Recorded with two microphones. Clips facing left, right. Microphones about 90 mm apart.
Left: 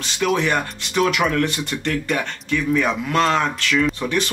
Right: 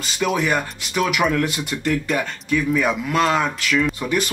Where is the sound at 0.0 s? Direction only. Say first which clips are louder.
Left 1 dB; 5° right (ahead or behind).